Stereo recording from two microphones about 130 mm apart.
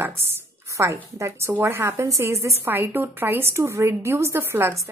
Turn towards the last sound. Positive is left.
turn(degrees=-20)  # may be behind; listen again after turning